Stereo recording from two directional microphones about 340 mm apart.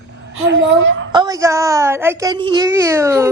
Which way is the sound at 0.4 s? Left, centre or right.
Right.